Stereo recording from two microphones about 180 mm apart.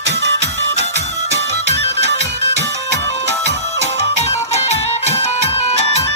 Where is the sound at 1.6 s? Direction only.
70° right (ahead or behind).